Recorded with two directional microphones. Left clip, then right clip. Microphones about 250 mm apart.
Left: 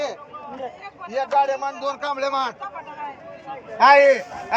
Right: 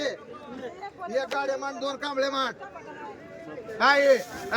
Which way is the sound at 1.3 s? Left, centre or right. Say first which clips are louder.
Left 9 dB; centre.